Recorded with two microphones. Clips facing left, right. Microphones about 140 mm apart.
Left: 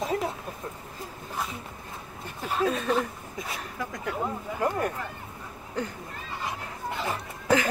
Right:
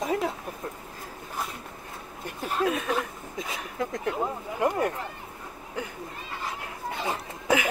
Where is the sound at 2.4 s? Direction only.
5° right (ahead or behind).